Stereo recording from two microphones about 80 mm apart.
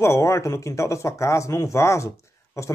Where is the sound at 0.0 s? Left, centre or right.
Left.